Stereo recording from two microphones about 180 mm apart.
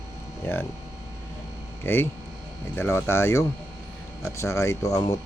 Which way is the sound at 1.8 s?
10° left (ahead or behind).